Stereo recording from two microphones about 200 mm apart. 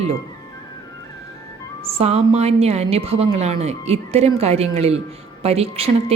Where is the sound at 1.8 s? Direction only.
30° right (ahead or behind).